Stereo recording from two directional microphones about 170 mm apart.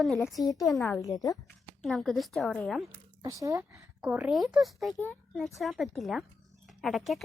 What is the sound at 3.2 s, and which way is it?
Speech, 20° right (ahead or behind).